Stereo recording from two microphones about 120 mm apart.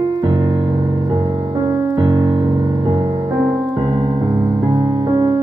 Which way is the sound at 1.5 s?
35° right (ahead or behind).